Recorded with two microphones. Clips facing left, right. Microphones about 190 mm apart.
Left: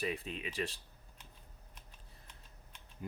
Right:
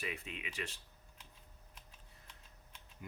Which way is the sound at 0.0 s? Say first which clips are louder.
Left 6 dB; 35° left (ahead or behind).